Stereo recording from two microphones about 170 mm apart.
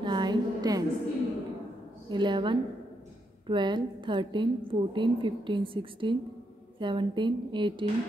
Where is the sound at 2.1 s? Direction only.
25° right (ahead or behind).